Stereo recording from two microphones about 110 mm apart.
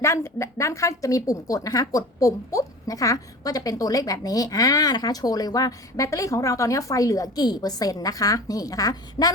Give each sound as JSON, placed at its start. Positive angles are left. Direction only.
{"t": 0.0, "sound": "speech", "side_deg": 25}